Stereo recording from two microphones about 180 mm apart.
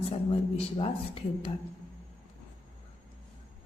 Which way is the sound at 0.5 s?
30° left (ahead or behind).